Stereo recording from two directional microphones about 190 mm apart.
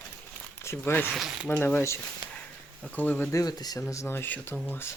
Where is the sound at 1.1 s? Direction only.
Centre (ahead or behind).